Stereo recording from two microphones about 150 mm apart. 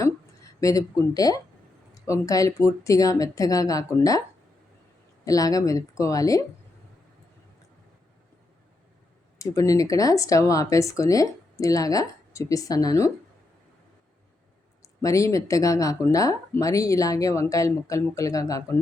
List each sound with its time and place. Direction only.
0.6 s speech: 20° left (ahead or behind)
5.2 s speech: 25° left (ahead or behind)
9.4 s speech: 20° left (ahead or behind)
14.8 s speech: 20° left (ahead or behind)